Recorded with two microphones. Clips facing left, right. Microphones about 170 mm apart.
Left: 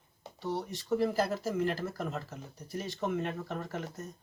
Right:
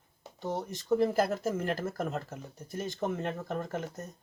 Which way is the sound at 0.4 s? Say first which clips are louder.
Right 2 dB; 45° right (ahead or behind).